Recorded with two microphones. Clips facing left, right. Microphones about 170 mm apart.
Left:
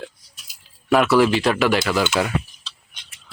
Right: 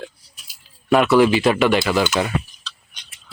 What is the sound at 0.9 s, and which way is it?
Speech, centre (ahead or behind).